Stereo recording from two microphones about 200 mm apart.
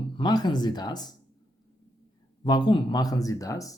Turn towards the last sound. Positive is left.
turn(degrees=15)  # may be behind; listen again after turning